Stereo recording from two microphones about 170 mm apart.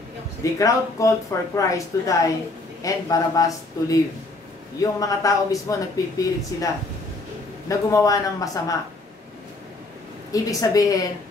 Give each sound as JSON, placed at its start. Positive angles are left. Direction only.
{"t": 0.4, "sound": "speech", "side_deg": 20}
{"t": 10.3, "sound": "speech", "side_deg": 20}